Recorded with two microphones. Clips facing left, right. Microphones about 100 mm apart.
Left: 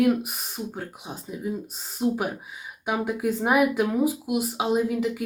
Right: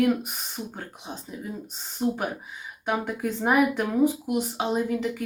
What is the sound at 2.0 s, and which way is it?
Speech, 10° left (ahead or behind).